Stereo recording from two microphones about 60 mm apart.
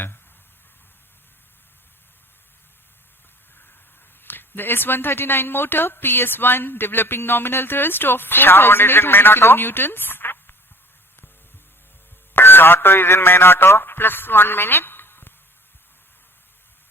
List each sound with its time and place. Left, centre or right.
4.2 s speech: left
12.3 s a man's voice: left